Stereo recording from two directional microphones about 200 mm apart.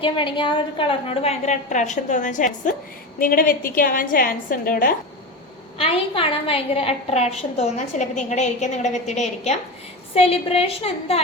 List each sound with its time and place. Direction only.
0.0 s a woman's voice: 25° left (ahead or behind); by 4.9 s 45° left (ahead or behind)
5.7 s a woman's voice: 30° left (ahead or behind)